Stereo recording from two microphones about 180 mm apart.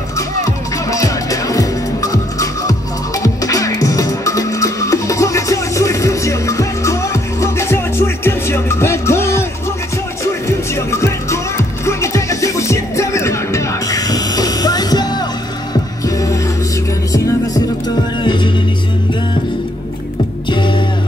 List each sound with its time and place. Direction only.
0.4 s music: 20° left (ahead or behind)
10.9 s music: 15° left (ahead or behind)
17.8 s music: 25° left (ahead or behind)
20.4 s music: 25° left (ahead or behind)